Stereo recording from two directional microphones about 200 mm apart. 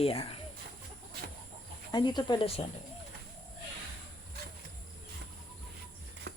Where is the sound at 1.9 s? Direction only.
20° left (ahead or behind).